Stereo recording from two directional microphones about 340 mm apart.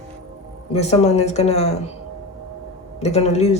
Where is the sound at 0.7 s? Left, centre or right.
Centre.